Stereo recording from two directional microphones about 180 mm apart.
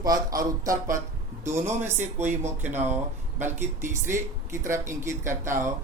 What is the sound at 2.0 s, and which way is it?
Speech, 10° right (ahead or behind).